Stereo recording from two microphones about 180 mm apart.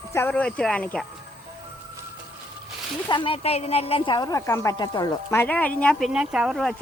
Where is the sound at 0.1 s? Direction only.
10° left (ahead or behind).